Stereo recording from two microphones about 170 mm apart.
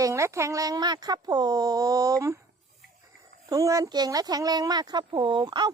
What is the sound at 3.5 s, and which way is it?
Speech, 20° right (ahead or behind).